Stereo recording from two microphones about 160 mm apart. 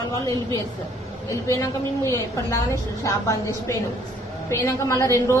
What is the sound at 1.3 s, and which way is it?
Speech, 20° left (ahead or behind).